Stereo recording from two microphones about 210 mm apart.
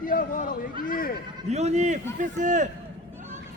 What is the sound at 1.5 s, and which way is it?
A man's voice, 30° right (ahead or behind).